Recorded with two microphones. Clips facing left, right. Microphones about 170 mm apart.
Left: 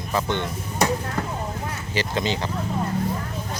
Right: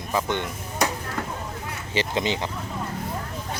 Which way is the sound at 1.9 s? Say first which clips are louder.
Even; 20° right (ahead or behind).